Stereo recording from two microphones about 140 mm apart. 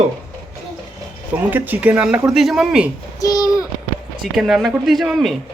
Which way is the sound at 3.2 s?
25° left (ahead or behind).